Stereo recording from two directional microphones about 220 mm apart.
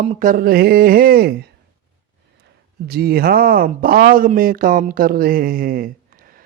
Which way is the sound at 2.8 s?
45° right (ahead or behind).